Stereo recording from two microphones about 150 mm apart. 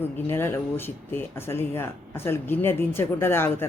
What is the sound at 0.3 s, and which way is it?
Speech, 15° left (ahead or behind).